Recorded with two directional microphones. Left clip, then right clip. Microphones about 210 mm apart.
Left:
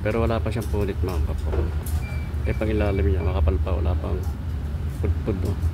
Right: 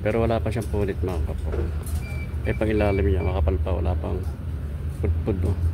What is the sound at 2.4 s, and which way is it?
Speech, 15° right (ahead or behind).